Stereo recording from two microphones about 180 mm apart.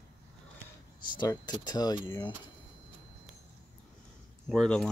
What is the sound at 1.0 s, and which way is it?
Speech, 25° left (ahead or behind).